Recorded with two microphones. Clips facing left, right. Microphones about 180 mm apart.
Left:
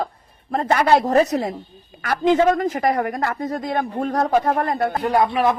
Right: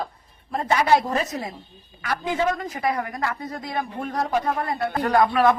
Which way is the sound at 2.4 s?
50° left (ahead or behind).